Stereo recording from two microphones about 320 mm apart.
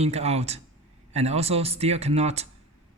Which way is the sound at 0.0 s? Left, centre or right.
Centre.